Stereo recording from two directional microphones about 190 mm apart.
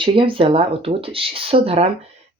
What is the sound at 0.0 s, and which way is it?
Speech, 25° right (ahead or behind).